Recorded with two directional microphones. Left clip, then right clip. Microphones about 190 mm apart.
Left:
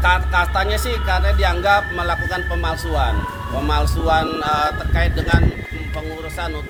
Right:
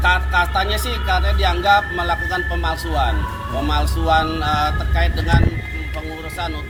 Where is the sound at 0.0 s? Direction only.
20° left (ahead or behind).